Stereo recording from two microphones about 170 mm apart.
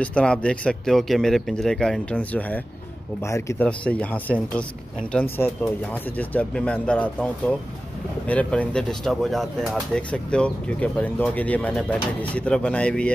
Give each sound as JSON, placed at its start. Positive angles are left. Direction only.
{"t": 0.0, "sound": "speech", "side_deg": 5}